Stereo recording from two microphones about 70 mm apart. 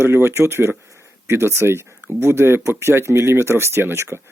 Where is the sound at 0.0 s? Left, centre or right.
Right.